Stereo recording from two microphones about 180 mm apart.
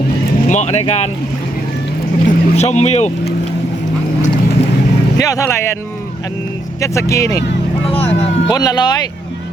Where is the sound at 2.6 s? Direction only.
40° left (ahead or behind).